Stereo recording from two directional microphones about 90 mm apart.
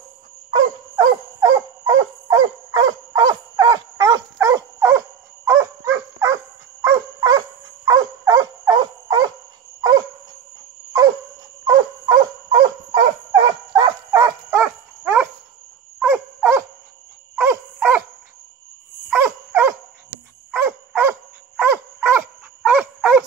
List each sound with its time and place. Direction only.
0.5 s dog: 45° right (ahead or behind)
11.6 s dog: 50° right (ahead or behind)
13.4 s dog: 80° right
14.1 s dog: 40° right (ahead or behind)
14.6 s dog: 15° right (ahead or behind)
19.1 s dog: 25° right (ahead or behind)
22.6 s dog: 10° right (ahead or behind)